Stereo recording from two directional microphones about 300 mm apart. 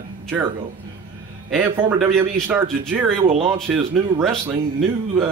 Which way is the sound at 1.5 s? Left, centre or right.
Centre.